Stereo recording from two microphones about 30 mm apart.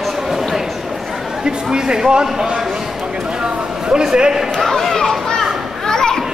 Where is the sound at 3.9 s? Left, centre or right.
Right.